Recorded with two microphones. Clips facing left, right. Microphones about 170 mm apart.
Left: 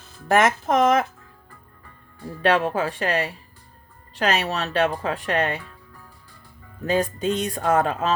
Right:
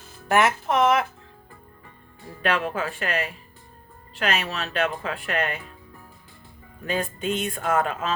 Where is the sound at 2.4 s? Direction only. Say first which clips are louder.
Left 5 dB; 35° left (ahead or behind).